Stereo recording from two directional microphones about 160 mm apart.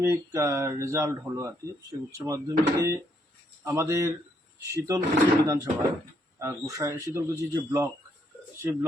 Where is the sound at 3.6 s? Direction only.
20° right (ahead or behind).